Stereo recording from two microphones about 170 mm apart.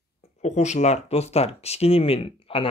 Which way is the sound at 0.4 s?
45° left (ahead or behind).